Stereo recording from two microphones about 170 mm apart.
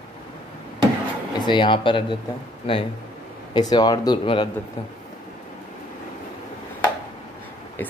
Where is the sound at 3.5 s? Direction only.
20° left (ahead or behind).